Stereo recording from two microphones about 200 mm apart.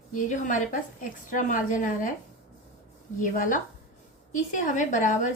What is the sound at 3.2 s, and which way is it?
A woman's voice, 40° left (ahead or behind).